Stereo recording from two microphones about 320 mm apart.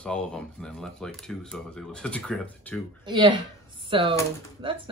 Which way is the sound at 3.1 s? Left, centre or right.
Centre.